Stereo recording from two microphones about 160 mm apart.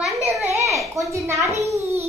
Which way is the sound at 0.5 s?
20° right (ahead or behind).